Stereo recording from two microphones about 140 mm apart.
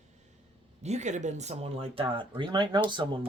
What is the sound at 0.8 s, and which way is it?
Speech, 55° right (ahead or behind).